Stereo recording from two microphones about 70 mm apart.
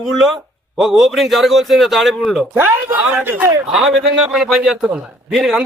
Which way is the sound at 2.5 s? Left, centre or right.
Right.